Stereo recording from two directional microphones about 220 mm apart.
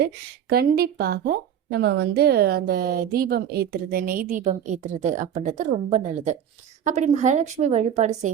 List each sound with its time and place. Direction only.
0.5 s a woman's voice: 45° right (ahead or behind)